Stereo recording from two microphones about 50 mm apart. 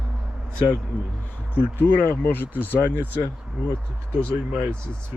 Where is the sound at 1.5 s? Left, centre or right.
Left.